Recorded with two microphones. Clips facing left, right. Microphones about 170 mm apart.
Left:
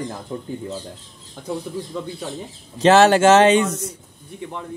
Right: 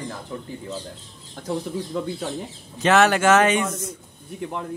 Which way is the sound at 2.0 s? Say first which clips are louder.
Right 4 dB; 5° right (ahead or behind).